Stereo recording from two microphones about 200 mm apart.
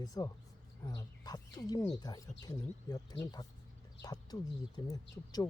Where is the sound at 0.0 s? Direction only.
20° left (ahead or behind).